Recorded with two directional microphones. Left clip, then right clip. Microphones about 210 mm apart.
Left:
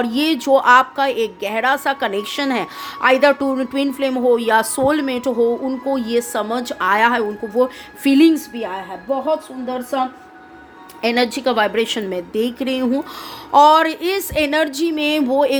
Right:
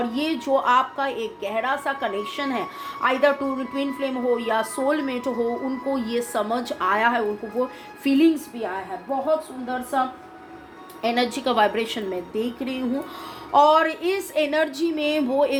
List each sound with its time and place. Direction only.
0.0 s a woman's voice: 45° left (ahead or behind)
11.0 s a woman's voice: 40° left (ahead or behind)